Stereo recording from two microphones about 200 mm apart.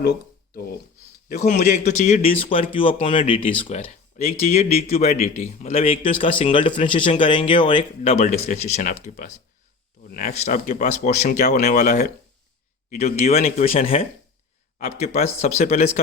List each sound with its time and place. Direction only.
1.4 s speech: 40° left (ahead or behind)